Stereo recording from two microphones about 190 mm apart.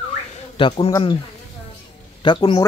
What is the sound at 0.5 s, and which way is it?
Speech, 30° left (ahead or behind).